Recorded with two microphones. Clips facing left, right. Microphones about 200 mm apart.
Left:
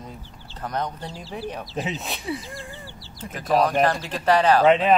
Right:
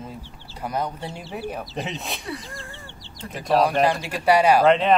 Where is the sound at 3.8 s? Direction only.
10° right (ahead or behind).